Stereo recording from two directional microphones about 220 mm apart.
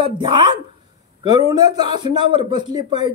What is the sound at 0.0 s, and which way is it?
A man's voice, 20° right (ahead or behind).